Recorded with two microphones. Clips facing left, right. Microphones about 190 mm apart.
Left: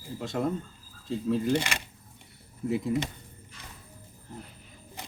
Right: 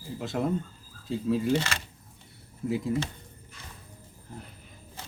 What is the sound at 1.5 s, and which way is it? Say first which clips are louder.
Speech: even; 15° left (ahead or behind).